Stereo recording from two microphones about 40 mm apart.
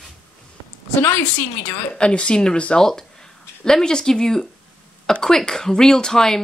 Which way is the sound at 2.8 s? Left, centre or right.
Centre.